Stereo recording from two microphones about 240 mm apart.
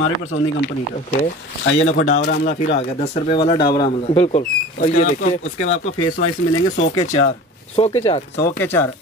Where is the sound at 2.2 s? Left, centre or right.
Left.